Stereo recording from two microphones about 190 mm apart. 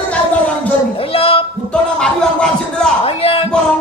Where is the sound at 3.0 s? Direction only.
30° left (ahead or behind).